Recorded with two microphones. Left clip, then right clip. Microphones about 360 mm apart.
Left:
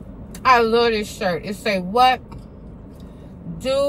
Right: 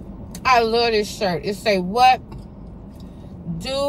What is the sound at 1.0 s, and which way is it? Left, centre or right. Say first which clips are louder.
Speech: right 1 dB; centre.